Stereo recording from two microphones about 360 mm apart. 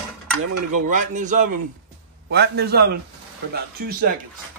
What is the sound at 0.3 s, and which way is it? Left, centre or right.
Cutlery, right.